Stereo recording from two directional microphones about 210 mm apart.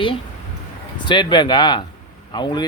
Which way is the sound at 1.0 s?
20° left (ahead or behind).